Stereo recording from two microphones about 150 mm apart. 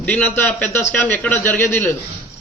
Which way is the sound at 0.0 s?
10° left (ahead or behind).